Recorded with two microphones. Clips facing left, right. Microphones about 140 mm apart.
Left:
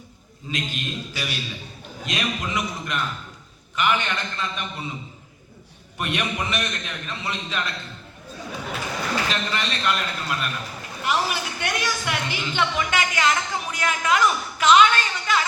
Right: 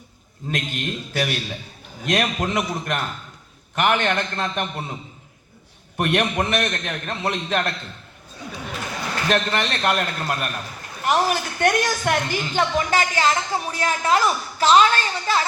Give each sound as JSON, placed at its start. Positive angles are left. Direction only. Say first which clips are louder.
{"t": 0.4, "sound": "a man's voice", "louder": "right 3 dB", "side_deg": -55}
{"t": 6.0, "sound": "a man's voice", "louder": "right 6 dB", "side_deg": -55}
{"t": 9.3, "sound": "a man's voice", "louder": "right 5 dB", "side_deg": -60}